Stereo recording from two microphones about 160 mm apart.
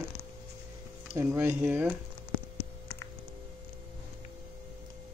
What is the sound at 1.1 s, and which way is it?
Speech, 15° right (ahead or behind).